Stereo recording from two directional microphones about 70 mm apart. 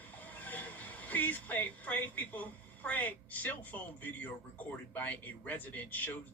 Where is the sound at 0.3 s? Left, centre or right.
Left.